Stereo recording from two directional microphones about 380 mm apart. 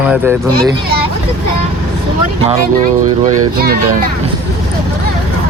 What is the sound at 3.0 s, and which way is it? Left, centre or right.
Speech, right.